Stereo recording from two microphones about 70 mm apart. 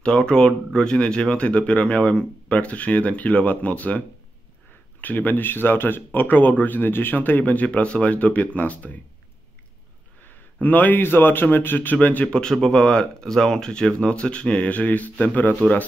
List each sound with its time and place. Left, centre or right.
0.0 s speech: centre
5.0 s speech: left
10.6 s speech: left
12.6 s speech: centre